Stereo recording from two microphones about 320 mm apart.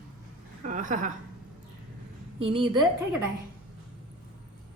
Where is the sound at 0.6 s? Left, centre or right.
Right.